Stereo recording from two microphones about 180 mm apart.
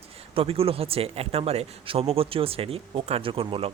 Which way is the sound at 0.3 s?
30° right (ahead or behind).